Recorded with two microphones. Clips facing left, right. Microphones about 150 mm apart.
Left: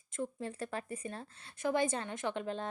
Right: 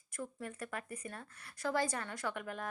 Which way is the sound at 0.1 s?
25° left (ahead or behind).